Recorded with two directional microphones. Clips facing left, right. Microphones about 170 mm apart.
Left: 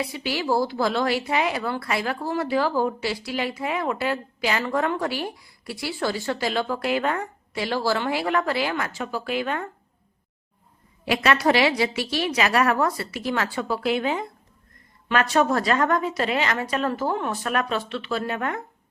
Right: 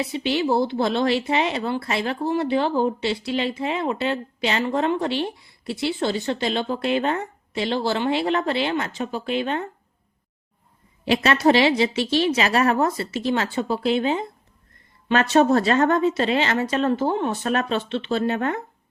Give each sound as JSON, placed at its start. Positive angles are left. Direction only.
{"t": 0.0, "sound": "a woman's voice", "side_deg": -25}
{"t": 11.0, "sound": "a woman's voice", "side_deg": -25}